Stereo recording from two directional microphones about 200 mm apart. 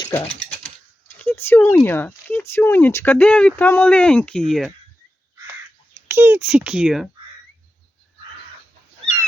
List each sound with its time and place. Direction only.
1.2 s speech: 10° left (ahead or behind)
6.1 s a child's voice: 10° right (ahead or behind)